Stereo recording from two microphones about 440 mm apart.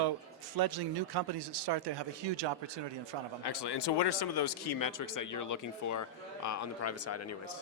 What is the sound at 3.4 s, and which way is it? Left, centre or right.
Speech, left.